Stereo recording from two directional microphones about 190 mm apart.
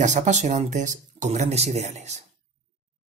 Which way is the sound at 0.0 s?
40° right (ahead or behind).